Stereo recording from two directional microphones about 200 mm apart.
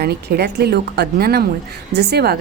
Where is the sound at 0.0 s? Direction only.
55° right (ahead or behind).